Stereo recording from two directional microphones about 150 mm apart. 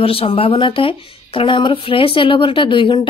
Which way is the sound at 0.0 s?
40° left (ahead or behind).